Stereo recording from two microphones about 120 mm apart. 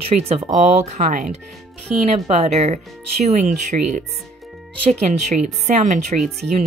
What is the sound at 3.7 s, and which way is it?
Speech, 85° right.